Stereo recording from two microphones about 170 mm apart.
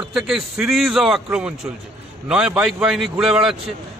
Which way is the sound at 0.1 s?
Centre (ahead or behind).